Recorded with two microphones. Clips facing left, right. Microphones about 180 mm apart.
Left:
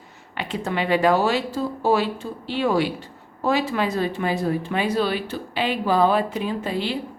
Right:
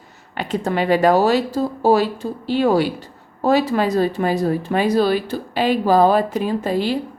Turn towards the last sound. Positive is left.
turn(degrees=-40)  # may be behind; listen again after turning